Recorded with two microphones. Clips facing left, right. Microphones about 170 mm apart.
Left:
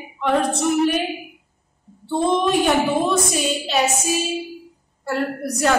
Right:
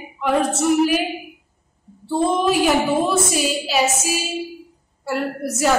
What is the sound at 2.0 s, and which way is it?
A woman's voice, 5° right (ahead or behind).